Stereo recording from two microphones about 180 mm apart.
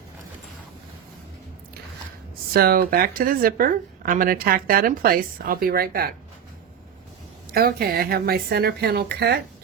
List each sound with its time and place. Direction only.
2.5 s speech: 55° right (ahead or behind)
7.5 s a woman's voice: 60° right (ahead or behind)